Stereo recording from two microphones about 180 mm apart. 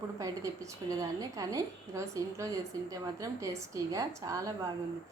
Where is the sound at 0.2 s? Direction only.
15° right (ahead or behind).